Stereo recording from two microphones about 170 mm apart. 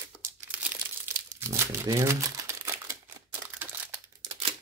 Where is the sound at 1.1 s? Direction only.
15° right (ahead or behind).